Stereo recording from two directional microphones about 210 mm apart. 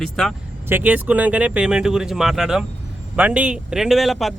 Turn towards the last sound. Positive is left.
turn(degrees=0)  # may be behind; listen again after turning